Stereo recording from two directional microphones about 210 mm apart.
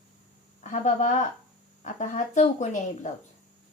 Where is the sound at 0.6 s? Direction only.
35° left (ahead or behind).